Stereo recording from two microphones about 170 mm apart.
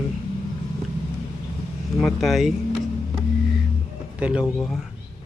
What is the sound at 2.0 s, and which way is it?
Speech, centre (ahead or behind).